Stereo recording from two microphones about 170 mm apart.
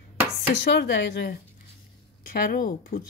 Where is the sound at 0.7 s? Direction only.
90° left.